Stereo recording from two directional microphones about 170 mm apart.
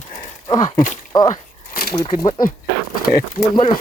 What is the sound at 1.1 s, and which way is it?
Speech, 25° left (ahead or behind).